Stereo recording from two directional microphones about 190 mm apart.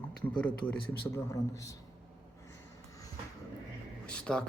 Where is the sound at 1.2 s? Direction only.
15° left (ahead or behind).